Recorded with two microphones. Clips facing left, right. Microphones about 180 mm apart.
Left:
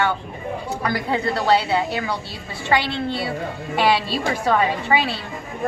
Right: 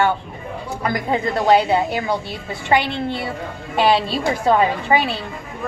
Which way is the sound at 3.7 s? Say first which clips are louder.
Right 3 dB; 20° right (ahead or behind).